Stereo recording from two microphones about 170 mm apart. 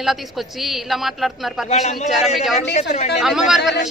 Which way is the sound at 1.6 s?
40° left (ahead or behind).